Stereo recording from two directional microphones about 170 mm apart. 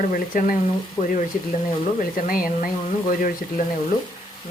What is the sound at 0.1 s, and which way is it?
Speech, 50° left (ahead or behind).